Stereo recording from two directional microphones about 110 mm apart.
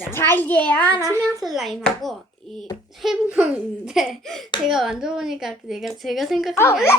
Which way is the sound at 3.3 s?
10° right (ahead or behind).